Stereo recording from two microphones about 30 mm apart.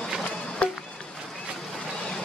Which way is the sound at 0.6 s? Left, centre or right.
Left.